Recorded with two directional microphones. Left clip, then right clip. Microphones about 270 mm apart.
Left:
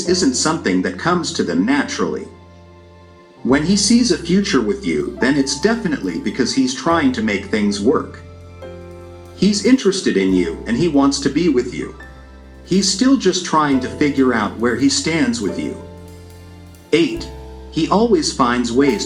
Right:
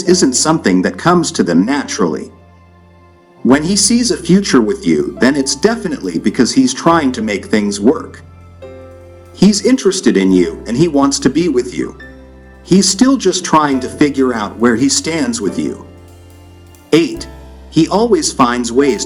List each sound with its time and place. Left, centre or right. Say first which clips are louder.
0.0 s speech: right 5 dB; right
3.5 s speech: right 3 dB; right
9.3 s speech: right 3 dB; right
16.9 s speech: right 4 dB; right